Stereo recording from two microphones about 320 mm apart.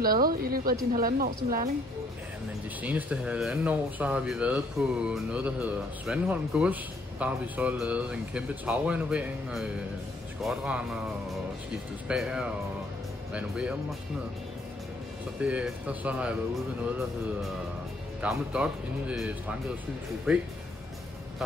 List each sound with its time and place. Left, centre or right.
0.0 s a woman's voice: right
2.8 s speech: centre
12.1 s speech: centre
15.4 s speech: centre
18.2 s speech: centre